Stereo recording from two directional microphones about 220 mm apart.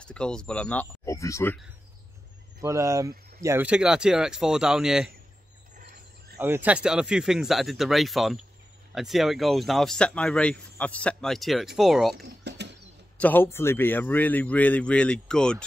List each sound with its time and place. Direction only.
0.0 s speech: 5° left (ahead or behind)
2.6 s speech: 15° right (ahead or behind)
5.8 s a sound: 45° right (ahead or behind)
6.3 s speech: 10° right (ahead or behind)
12.4 s pigeon: 50° right (ahead or behind)
13.2 s speech: 10° left (ahead or behind)